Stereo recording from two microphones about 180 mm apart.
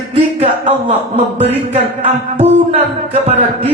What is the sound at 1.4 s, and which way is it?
Music, 35° right (ahead or behind).